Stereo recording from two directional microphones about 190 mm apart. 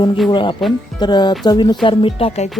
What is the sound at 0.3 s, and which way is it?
Speech, 25° left (ahead or behind).